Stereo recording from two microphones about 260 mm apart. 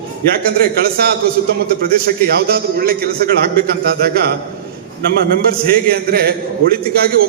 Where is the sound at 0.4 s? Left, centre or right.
Right.